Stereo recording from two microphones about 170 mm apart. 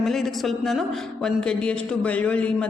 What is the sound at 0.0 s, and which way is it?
A man's voice, centre (ahead or behind).